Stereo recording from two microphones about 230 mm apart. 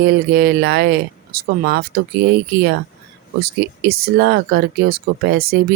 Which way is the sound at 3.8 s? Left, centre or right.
Right.